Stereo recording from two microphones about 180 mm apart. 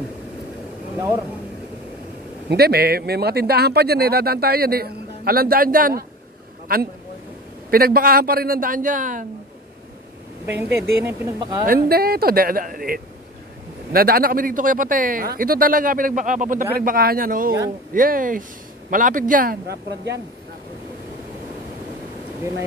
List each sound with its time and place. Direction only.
2.5 s speech: 60° right (ahead or behind)
10.6 s speech: 15° right (ahead or behind)
11.6 s speech: 55° right (ahead or behind)